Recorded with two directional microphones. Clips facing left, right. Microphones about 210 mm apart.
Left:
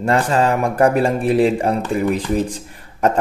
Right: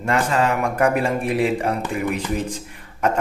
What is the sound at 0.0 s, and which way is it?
A man's voice, 35° left (ahead or behind).